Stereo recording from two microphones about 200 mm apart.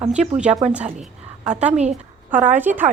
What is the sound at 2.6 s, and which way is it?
Speech, 10° right (ahead or behind).